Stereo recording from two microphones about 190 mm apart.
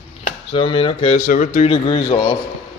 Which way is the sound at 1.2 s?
45° left (ahead or behind).